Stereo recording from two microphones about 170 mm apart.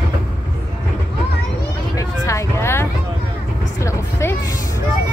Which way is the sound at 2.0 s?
15° left (ahead or behind).